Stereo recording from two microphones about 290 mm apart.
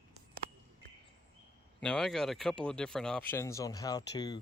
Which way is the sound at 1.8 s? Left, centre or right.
Centre.